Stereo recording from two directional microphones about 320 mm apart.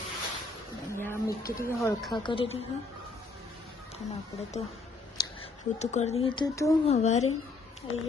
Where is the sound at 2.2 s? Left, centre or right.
Centre.